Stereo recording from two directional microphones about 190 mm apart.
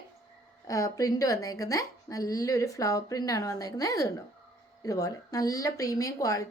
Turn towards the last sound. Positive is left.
turn(degrees=20)  # may be behind; listen again after turning